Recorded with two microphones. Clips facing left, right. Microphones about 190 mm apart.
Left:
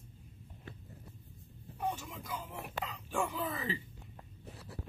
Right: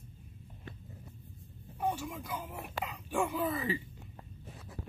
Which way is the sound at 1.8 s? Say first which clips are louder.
Right 4 dB; 10° right (ahead or behind).